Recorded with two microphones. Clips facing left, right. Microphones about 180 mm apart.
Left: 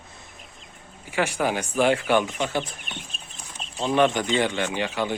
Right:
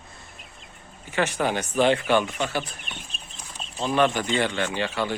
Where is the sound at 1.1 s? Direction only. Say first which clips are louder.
Even; 10° left (ahead or behind).